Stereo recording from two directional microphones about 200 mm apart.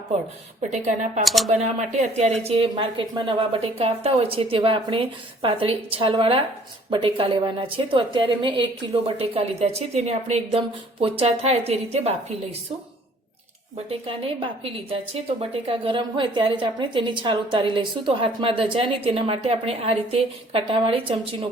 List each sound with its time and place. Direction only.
0.7 s a woman's voice: 35° right (ahead or behind)
1.2 s speech: centre (ahead or behind)
1.5 s a woman's voice: 35° right (ahead or behind)
13.7 s a woman's voice: 30° right (ahead or behind)